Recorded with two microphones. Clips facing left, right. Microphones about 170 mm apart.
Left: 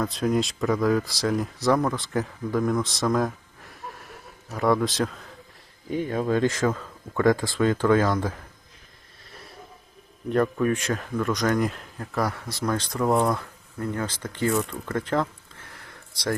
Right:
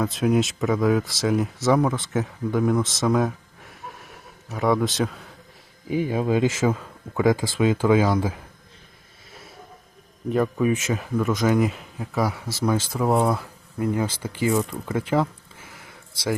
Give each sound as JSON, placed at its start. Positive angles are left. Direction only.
{"t": 0.0, "sound": "speech", "side_deg": -5}
{"t": 10.2, "sound": "speech", "side_deg": -5}
{"t": 15.7, "sound": "a sound", "side_deg": 0}